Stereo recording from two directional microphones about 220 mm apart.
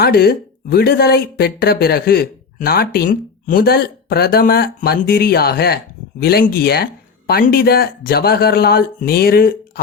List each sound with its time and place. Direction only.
0.0 s speech: 45° left (ahead or behind)